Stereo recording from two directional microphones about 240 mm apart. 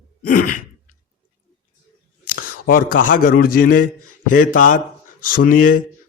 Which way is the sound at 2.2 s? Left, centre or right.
Left.